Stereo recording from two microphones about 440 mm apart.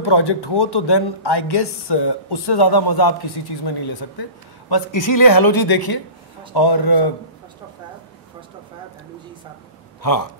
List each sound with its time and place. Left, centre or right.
0.0 s a woman's voice: left